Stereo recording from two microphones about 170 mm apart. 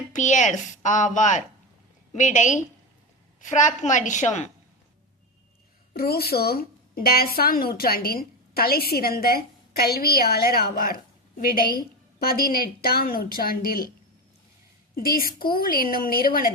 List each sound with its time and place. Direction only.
0.1 s a woman's voice: 45° left (ahead or behind)
5.9 s a woman's voice: 65° left (ahead or behind)
14.9 s a woman's voice: 60° left (ahead or behind)